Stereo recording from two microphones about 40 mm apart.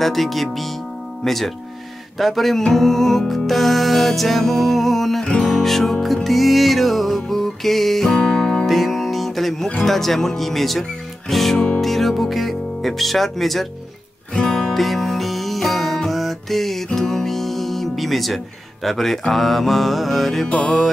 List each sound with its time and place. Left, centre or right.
0.0 s speech: centre
2.6 s music: centre
8.2 s music: left
8.6 s music: centre
9.8 s speech: centre
11.8 s music: centre
18.9 s speech: centre